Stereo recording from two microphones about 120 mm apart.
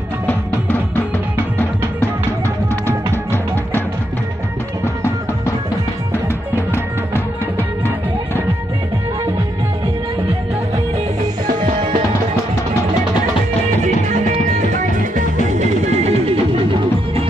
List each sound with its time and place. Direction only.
7.5 s music: 20° left (ahead or behind)
14.7 s music: 90° right; by 16.3 s 65° right (ahead or behind)